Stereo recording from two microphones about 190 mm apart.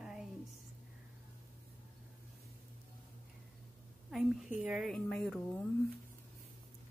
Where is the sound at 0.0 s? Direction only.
5° right (ahead or behind).